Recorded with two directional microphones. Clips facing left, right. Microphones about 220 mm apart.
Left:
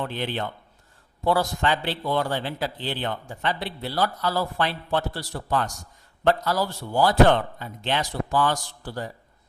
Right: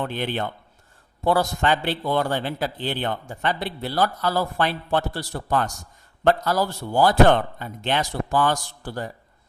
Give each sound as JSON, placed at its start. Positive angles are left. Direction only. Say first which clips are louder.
{"t": 0.1, "sound": "a man's voice", "louder": "right 2 dB", "side_deg": -50}